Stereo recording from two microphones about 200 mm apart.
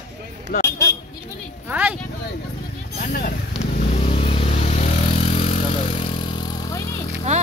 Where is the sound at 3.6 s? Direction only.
30° left (ahead or behind).